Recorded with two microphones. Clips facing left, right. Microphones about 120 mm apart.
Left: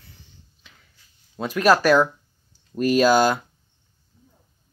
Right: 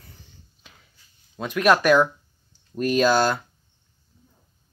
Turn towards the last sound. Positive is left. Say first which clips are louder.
# left 2 dB
turn(degrees=10)  # may be behind; listen again after turning